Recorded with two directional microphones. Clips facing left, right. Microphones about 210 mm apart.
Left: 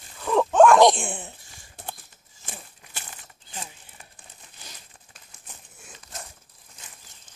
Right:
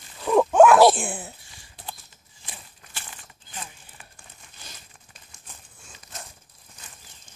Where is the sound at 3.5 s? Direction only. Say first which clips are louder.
Even; 30° left (ahead or behind).